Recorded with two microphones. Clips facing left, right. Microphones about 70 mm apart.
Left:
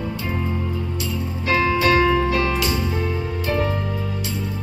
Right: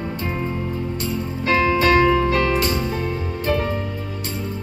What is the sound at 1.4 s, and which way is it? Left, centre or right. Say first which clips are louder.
Music: right 1 dB; right.